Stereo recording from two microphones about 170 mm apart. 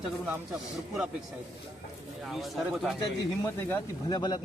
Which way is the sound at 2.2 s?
Centre (ahead or behind).